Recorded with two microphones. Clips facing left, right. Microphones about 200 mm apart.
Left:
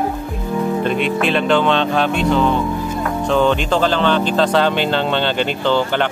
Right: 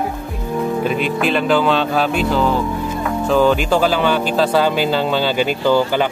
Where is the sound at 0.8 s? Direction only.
5° right (ahead or behind).